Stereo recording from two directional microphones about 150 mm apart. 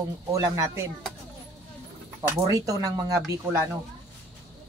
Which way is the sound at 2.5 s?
20° right (ahead or behind).